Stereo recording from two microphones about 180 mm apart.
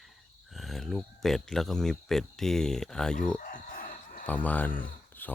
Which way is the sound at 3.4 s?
50° left (ahead or behind).